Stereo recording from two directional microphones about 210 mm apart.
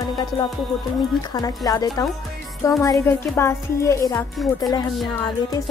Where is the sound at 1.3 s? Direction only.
15° left (ahead or behind).